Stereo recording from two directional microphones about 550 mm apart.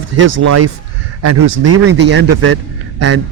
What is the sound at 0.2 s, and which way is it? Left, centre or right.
Speech, right.